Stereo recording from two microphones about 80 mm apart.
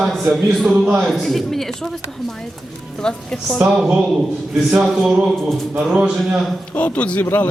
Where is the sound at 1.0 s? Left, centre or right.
Centre.